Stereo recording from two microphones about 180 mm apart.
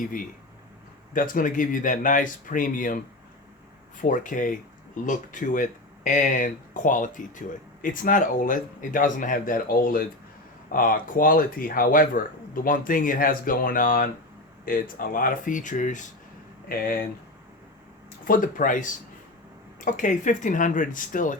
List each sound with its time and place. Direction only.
0.0 s speech: 50° left (ahead or behind)
4.0 s speech: 45° left (ahead or behind)
16.6 s speech: 55° left (ahead or behind)
18.3 s speech: 50° left (ahead or behind)